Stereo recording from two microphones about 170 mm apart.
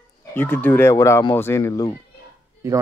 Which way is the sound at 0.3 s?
10° left (ahead or behind).